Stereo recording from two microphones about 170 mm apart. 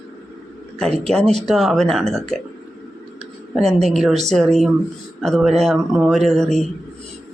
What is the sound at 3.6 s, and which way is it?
Speech, centre (ahead or behind).